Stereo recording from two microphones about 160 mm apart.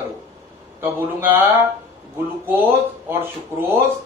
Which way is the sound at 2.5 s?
10° right (ahead or behind).